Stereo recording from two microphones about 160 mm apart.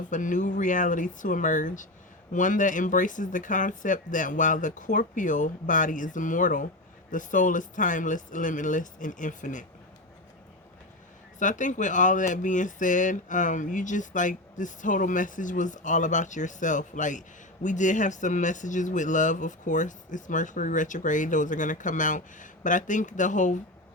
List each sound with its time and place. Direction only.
0.1 s speech: 55° left (ahead or behind)
11.3 s speech: 50° left (ahead or behind)